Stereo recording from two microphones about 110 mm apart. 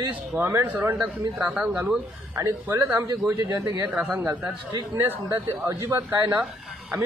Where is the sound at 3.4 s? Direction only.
25° right (ahead or behind).